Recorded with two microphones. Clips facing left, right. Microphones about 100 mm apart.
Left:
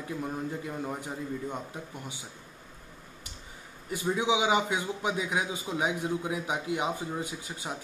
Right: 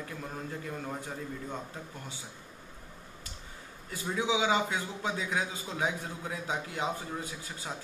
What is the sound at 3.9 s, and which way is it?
Speech, 20° left (ahead or behind).